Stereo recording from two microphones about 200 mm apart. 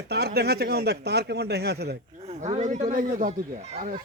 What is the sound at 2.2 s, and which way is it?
Speech, 35° right (ahead or behind).